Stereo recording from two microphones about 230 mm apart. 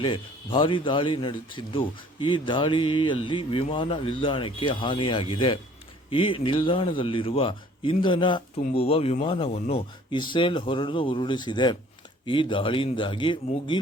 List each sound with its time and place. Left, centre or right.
0.0 s speech: left